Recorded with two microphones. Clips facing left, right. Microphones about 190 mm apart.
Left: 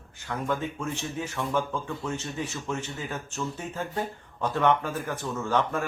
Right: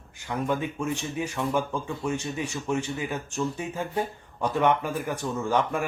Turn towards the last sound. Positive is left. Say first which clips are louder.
# right 1 dB
turn(degrees=-15)  # may be behind; listen again after turning